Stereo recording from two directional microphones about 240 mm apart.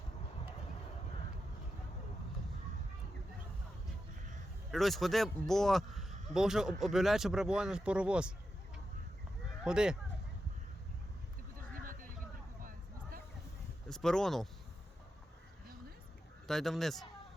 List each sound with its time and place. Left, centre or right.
4.7 s a man's voice: centre
9.6 s a man's voice: centre
11.5 s a sound: right
13.8 s speech: centre
16.5 s a man's voice: centre